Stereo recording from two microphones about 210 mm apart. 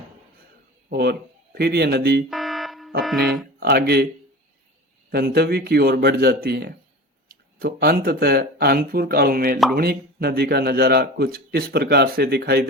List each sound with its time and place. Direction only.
0.9 s a man's voice: 50° right (ahead or behind)
2.3 s fire alarm: centre (ahead or behind)
3.6 s a man's voice: 50° right (ahead or behind)
5.1 s a man's voice: 50° right (ahead or behind)